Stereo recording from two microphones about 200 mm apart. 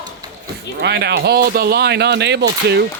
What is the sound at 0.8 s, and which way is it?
Speech, 55° right (ahead or behind).